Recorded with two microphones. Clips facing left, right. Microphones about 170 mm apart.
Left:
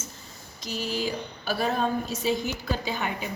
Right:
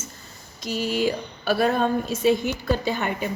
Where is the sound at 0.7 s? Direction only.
65° right (ahead or behind).